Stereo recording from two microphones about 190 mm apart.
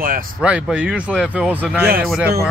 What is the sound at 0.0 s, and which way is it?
Speech, 50° right (ahead or behind).